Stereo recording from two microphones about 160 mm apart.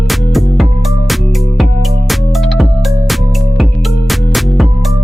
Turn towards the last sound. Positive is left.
turn(degrees=0)  # may be behind; listen again after turning